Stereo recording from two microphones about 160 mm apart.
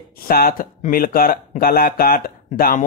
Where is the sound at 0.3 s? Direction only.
65° left (ahead or behind).